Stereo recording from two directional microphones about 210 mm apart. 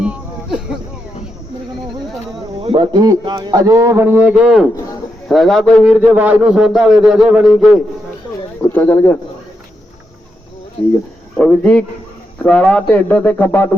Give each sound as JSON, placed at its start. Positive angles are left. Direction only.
{"t": 0.0, "sound": "a sound", "side_deg": -5}
{"t": 2.6, "sound": "a man's voice", "side_deg": -25}
{"t": 8.7, "sound": "speech", "side_deg": 10}
{"t": 11.3, "sound": "a man's voice", "side_deg": 0}